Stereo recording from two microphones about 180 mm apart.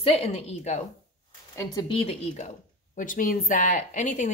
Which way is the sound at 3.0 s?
45° left (ahead or behind).